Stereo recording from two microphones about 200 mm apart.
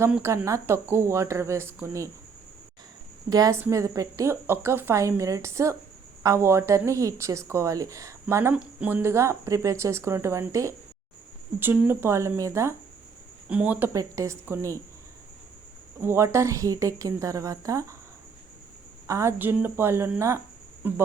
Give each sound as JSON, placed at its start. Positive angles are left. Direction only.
{"t": 0.0, "sound": "speech", "side_deg": -15}
{"t": 3.2, "sound": "speech", "side_deg": -20}
{"t": 16.0, "sound": "speech", "side_deg": -10}
{"t": 19.0, "sound": "speech", "side_deg": -15}